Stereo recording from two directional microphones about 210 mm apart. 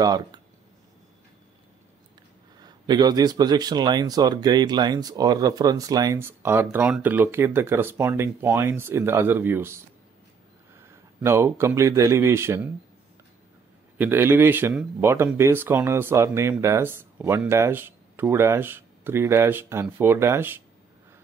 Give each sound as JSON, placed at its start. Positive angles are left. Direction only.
{"t": 0.0, "sound": "speech", "side_deg": -20}
{"t": 2.6, "sound": "speech", "side_deg": -20}
{"t": 10.9, "sound": "speech", "side_deg": -15}
{"t": 13.9, "sound": "speech", "side_deg": -10}